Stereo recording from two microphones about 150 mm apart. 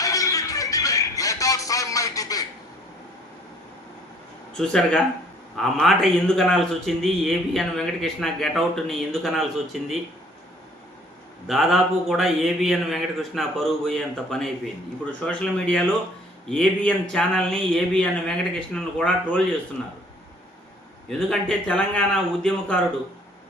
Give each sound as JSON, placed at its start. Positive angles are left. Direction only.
{"t": 0.0, "sound": "music", "side_deg": 20}
{"t": 4.5, "sound": "a man's voice", "side_deg": 5}
{"t": 11.4, "sound": "a man's voice", "side_deg": 0}
{"t": 21.1, "sound": "a man's voice", "side_deg": 5}